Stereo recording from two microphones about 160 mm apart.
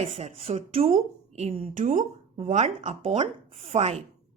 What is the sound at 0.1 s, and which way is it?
A woman's voice, 40° right (ahead or behind).